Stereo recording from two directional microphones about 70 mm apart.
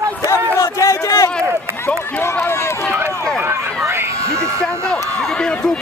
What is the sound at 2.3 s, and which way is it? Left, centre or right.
Run, left.